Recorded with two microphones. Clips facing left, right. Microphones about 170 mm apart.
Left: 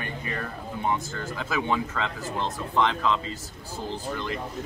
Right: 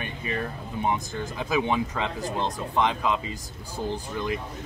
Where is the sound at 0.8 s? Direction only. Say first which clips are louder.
Right 1 dB; 15° right (ahead or behind).